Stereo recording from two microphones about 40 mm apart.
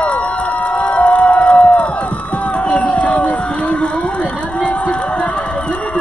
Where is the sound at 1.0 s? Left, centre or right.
Left.